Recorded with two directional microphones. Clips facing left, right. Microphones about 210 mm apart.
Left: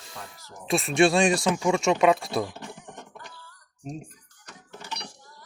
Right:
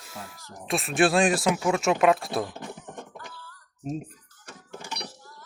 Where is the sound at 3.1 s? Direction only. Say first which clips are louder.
Right 2 dB; 15° left (ahead or behind).